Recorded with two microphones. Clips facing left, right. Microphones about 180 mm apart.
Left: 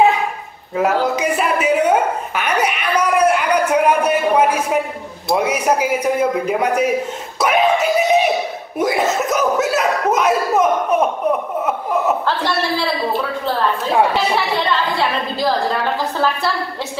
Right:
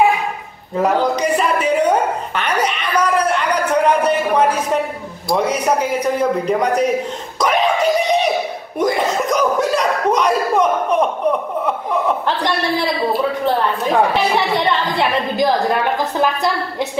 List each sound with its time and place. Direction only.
0.7 s a sound: 5° left (ahead or behind)
5.3 s speech: 10° left (ahead or behind)
7.3 s a sound: 5° left (ahead or behind)
8.7 s chuckle: 5° left (ahead or behind)
12.3 s a woman's voice: 15° right (ahead or behind)
14.3 s a woman's voice: 20° right (ahead or behind)